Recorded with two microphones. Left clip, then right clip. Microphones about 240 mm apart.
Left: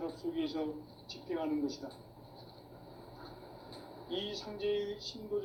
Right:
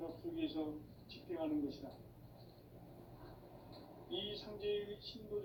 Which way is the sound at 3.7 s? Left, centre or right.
Left.